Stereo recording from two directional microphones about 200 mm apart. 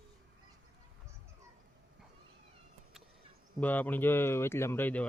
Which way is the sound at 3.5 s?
10° left (ahead or behind).